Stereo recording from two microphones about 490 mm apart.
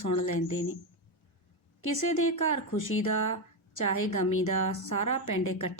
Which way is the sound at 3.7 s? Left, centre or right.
Left.